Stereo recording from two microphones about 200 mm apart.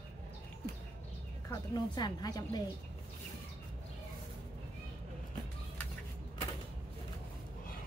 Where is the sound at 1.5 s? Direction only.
20° left (ahead or behind).